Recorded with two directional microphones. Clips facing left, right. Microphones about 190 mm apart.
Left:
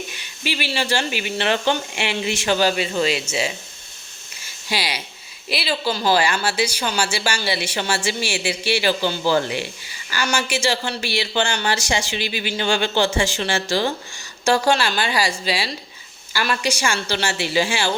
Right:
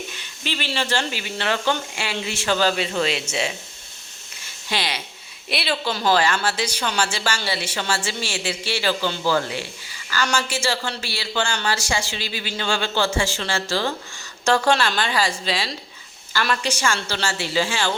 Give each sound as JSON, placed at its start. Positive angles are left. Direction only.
{"t": 0.1, "sound": "speech", "side_deg": 10}
{"t": 4.4, "sound": "a sound", "side_deg": 5}
{"t": 5.5, "sound": "speech", "side_deg": 0}